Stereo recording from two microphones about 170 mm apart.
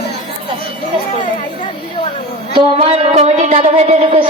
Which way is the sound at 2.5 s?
35° right (ahead or behind).